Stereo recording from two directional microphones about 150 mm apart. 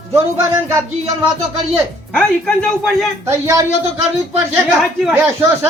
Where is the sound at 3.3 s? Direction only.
20° right (ahead or behind).